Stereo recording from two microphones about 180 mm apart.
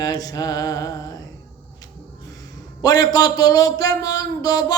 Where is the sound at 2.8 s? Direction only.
20° left (ahead or behind).